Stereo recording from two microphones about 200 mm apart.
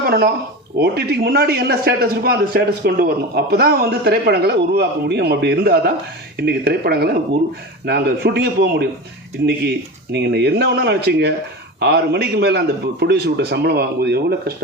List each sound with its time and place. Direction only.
0.0 s a man's voice: 50° right (ahead or behind)